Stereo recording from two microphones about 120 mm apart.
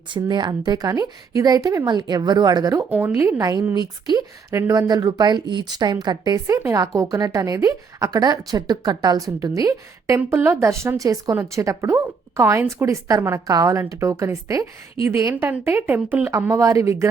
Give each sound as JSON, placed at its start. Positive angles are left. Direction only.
{"t": 0.1, "sound": "a woman's voice", "side_deg": -40}
{"t": 2.9, "sound": "a woman's voice", "side_deg": -20}
{"t": 4.5, "sound": "a woman's voice", "side_deg": -25}
{"t": 15.3, "sound": "a woman's voice", "side_deg": -15}